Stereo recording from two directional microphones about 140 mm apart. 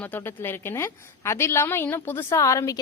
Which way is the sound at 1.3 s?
20° left (ahead or behind).